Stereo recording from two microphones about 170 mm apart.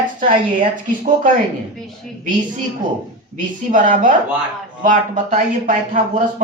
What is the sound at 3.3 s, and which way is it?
Speech, 50° right (ahead or behind).